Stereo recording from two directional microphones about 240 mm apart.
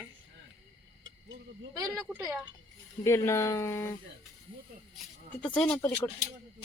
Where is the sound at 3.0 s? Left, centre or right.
Centre.